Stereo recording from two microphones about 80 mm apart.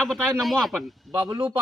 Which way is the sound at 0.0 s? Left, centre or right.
Centre.